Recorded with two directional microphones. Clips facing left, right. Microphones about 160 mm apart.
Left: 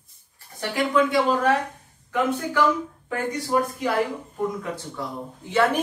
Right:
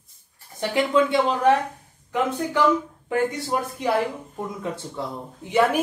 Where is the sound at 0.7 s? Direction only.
25° right (ahead or behind).